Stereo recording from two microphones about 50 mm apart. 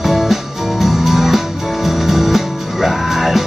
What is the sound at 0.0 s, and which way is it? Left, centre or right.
Music, centre.